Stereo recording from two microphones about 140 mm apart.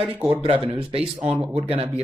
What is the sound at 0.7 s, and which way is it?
Speech, 45° right (ahead or behind).